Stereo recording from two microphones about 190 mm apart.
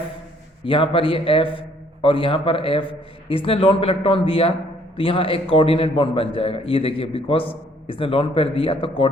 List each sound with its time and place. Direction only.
0.6 s a man's voice: 25° left (ahead or behind)